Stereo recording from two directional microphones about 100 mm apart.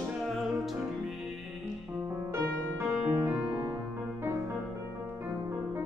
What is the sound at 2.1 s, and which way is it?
Music, 25° right (ahead or behind).